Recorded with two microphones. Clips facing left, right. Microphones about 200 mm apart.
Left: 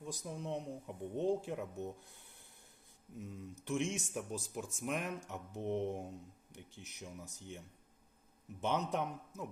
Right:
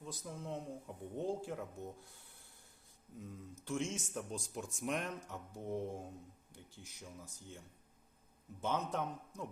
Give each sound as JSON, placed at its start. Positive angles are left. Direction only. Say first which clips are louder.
{"t": 0.0, "sound": "speech", "louder": "left 3 dB", "side_deg": 15}
{"t": 5.3, "sound": "speech", "louder": "left 3 dB", "side_deg": 20}
{"t": 8.6, "sound": "speech", "louder": "left 2 dB", "side_deg": 15}
{"t": 9.3, "sound": "speech", "louder": "left 1 dB", "side_deg": 5}